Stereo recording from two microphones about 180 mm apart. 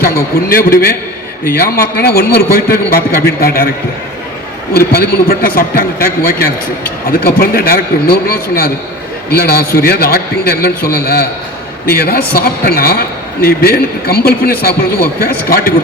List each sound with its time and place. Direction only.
0.0 s a man's voice: 55° left (ahead or behind)
4.9 s a man's voice: 55° left (ahead or behind)